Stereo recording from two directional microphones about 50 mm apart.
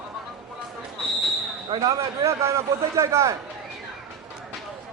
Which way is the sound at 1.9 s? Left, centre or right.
Right.